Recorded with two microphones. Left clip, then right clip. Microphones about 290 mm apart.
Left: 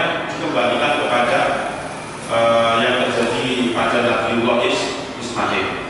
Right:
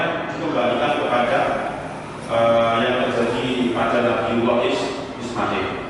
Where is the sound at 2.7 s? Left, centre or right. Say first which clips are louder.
Left 3 dB; centre.